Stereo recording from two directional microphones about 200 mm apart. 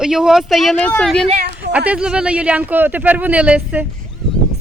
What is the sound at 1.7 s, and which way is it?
Speech, 5° right (ahead or behind).